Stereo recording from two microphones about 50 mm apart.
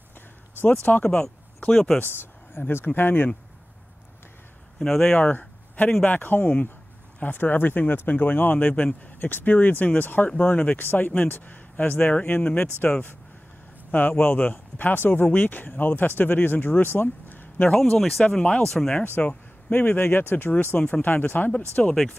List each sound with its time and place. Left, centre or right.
0.8 s speech: left
1.7 s speech: centre
2.0 s speech: left
4.7 s speech: centre
5.1 s a sound: left
6.0 s speech: left
10.8 s speech: left
17.7 s speech: centre
18.2 s speech: centre
19.2 s speech: left
21.8 s speech: centre